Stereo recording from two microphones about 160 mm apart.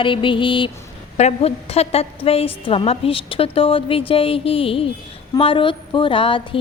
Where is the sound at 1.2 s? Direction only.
40° left (ahead or behind).